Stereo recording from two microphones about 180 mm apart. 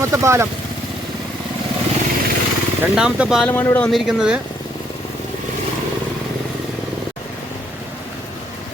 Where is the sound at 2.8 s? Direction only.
5° right (ahead or behind).